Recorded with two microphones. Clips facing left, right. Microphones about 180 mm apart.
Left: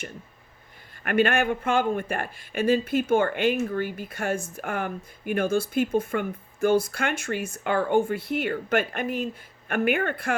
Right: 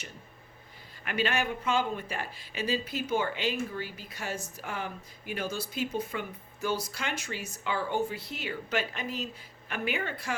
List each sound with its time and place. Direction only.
1.0 s speech: 55° left (ahead or behind)